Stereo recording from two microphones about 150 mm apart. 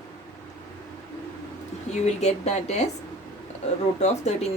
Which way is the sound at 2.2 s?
45° left (ahead or behind).